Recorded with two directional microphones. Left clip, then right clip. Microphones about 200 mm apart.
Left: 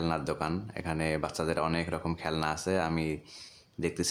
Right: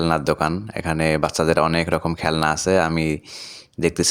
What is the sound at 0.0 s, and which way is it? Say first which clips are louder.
Speech: right 12 dB; 40° right (ahead or behind).